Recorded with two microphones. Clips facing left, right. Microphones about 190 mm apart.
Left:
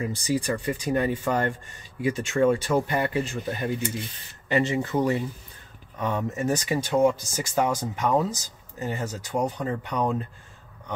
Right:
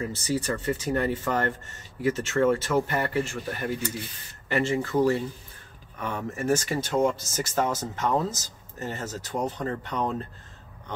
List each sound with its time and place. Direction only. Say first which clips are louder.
0.0 s speech: left 2 dB; 15° left (ahead or behind)